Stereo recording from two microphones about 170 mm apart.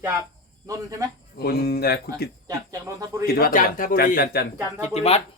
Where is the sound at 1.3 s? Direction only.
65° left (ahead or behind).